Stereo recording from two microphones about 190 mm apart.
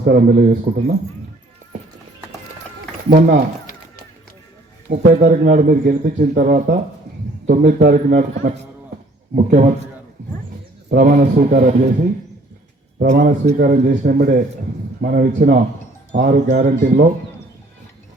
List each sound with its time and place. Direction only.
0.0 s a man's voice: 50° right (ahead or behind)
3.1 s a man's voice: 45° right (ahead or behind)
4.9 s a man's voice: 45° right (ahead or behind)
10.8 s a man's voice: 55° right (ahead or behind)
13.0 s a man's voice: 50° right (ahead or behind)